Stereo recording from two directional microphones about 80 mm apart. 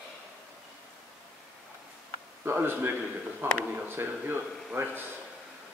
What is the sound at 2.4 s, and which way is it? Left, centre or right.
A man's voice, right.